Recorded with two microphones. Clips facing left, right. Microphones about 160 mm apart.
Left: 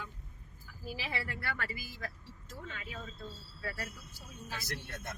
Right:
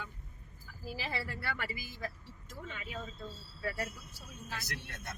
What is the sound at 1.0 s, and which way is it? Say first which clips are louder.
Speech: right 1 dB; centre (ahead or behind).